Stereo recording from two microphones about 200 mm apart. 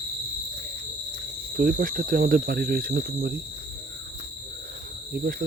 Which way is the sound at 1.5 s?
45° right (ahead or behind).